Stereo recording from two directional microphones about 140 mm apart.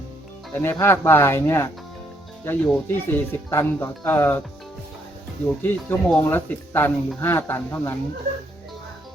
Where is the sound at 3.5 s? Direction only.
15° left (ahead or behind).